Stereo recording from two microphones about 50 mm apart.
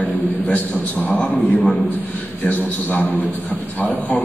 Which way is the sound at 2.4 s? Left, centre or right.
Left.